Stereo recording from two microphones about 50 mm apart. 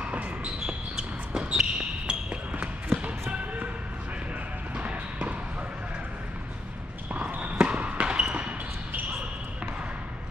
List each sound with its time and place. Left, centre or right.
0.7 s basketball bounce: centre
4.7 s basketball bounce: right
7.2 s basketball bounce: right